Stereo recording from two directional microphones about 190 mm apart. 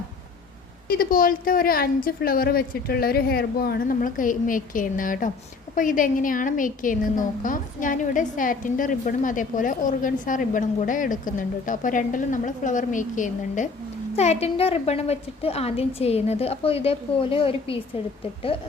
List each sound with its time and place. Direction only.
0.9 s a woman's voice: 50° left (ahead or behind); by 17.7 s 30° left (ahead or behind)